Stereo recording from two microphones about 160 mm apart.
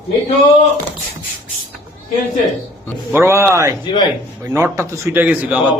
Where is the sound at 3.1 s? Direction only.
15° right (ahead or behind).